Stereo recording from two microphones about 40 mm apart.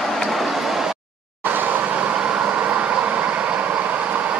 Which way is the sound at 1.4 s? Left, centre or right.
Right.